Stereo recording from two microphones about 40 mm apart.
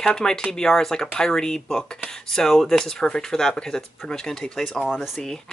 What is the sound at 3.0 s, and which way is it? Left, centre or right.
Speech, centre.